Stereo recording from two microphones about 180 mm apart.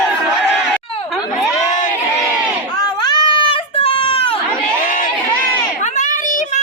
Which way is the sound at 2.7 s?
25° left (ahead or behind).